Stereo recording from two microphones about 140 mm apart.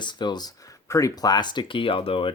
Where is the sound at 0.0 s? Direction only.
35° left (ahead or behind).